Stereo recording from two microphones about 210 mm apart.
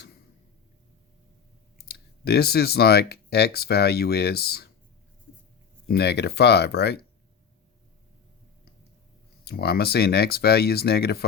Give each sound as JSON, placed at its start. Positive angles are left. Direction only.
{"t": 1.8, "sound": "speech", "side_deg": 50}
{"t": 5.9, "sound": "speech", "side_deg": 50}
{"t": 9.4, "sound": "speech", "side_deg": 50}